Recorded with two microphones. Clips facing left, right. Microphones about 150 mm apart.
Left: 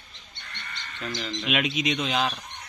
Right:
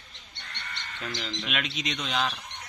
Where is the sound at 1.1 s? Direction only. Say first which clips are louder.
Left 6 dB; 5° left (ahead or behind).